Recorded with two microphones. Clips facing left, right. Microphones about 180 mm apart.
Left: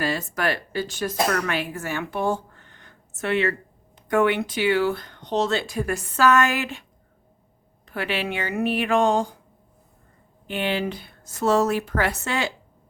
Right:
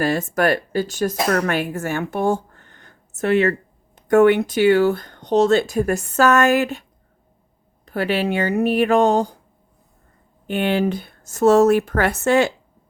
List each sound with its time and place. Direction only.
0.0 s speech: 45° right (ahead or behind)
7.9 s speech: 40° right (ahead or behind)
10.4 s speech: 50° right (ahead or behind)